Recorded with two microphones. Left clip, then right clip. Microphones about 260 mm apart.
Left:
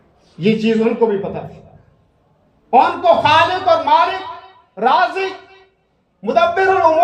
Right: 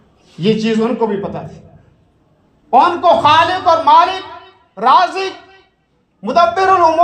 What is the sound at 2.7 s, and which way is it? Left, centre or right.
A man's voice, centre.